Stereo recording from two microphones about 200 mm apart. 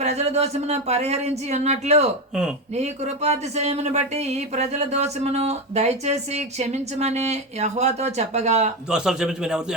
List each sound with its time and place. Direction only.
0.0 s speech: 35° right (ahead or behind)
8.9 s a man's voice: 5° right (ahead or behind)